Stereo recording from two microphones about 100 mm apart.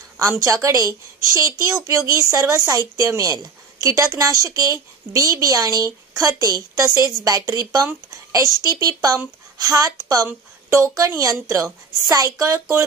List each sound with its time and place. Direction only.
0.3 s a woman's voice: 30° right (ahead or behind)